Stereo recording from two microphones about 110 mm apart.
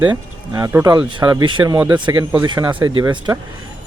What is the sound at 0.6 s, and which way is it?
Speech, 30° right (ahead or behind).